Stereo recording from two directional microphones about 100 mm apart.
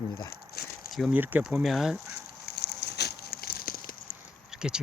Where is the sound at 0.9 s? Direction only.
5° right (ahead or behind).